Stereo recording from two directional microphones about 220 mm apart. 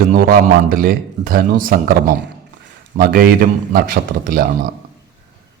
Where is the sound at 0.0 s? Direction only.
40° right (ahead or behind).